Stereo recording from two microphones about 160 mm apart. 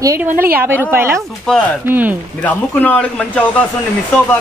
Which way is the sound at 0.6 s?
15° right (ahead or behind).